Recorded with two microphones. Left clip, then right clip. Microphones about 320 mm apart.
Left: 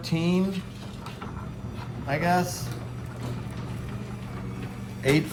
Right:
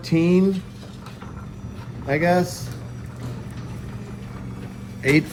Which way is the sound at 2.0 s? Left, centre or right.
Centre.